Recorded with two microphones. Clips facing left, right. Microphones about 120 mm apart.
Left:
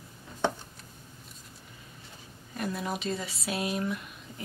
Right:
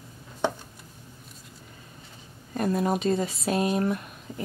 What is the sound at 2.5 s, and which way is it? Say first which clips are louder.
Speech: right 8 dB; 45° right (ahead or behind).